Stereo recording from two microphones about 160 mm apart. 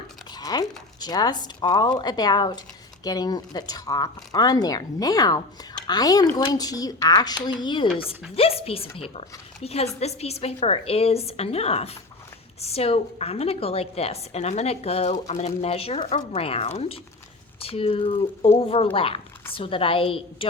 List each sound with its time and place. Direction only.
0.3 s a woman's voice: 25° left (ahead or behind)